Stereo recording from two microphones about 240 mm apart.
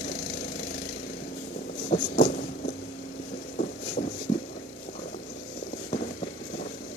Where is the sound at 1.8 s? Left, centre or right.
Left.